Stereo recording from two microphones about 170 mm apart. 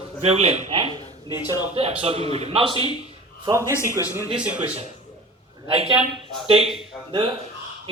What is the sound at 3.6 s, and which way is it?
Speech, 15° left (ahead or behind).